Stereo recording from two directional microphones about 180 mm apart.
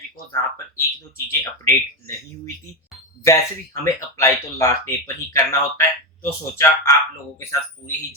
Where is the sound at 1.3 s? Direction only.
15° left (ahead or behind).